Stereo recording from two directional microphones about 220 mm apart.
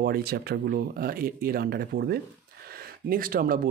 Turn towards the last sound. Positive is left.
turn(degrees=-40)  # may be behind; listen again after turning